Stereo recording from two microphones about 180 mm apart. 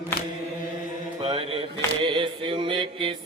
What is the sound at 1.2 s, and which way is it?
Mantra, 30° right (ahead or behind).